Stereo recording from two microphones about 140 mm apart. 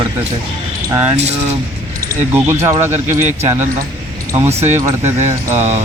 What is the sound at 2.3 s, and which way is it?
Speech, 15° right (ahead or behind).